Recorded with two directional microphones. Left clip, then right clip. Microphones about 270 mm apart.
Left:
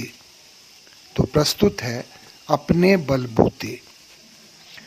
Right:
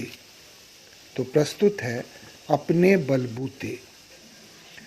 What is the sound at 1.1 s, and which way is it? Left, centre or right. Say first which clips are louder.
Speech: left 3 dB; left.